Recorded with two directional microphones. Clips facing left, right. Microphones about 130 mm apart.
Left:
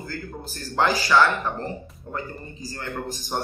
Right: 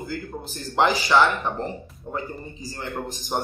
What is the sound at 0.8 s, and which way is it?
Speech, 20° right (ahead or behind).